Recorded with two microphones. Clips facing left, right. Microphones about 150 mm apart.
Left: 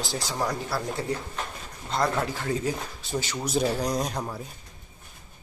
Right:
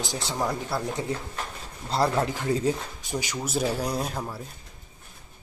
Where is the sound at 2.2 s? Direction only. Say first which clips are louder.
Right 3 dB; 15° right (ahead or behind).